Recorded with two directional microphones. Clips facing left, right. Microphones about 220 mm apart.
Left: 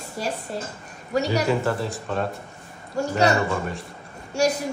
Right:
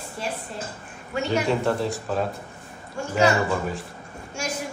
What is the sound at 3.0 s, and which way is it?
Speech, 40° left (ahead or behind).